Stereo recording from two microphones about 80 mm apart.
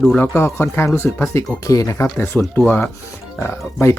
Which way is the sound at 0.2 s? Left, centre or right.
Left.